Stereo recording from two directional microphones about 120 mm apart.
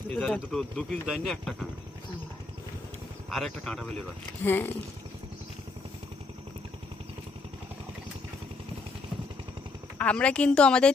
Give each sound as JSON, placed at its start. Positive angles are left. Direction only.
{"t": 0.1, "sound": "a woman's voice", "side_deg": 5}
{"t": 3.2, "sound": "speech", "side_deg": 0}
{"t": 4.4, "sound": "a woman's voice", "side_deg": 15}
{"t": 10.0, "sound": "a woman's voice", "side_deg": 10}